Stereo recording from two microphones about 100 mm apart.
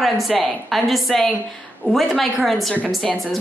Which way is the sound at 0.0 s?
Centre (ahead or behind).